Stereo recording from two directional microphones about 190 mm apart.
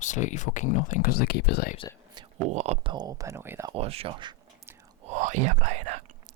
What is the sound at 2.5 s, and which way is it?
Speech, 35° right (ahead or behind).